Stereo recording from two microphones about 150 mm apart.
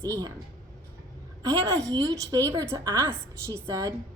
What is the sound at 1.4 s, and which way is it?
A woman's voice, 25° right (ahead or behind).